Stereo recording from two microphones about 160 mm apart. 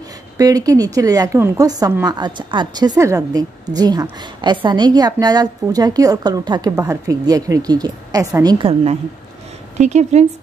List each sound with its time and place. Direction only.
0.4 s a woman's voice: 20° right (ahead or behind)
9.8 s speech: 45° right (ahead or behind)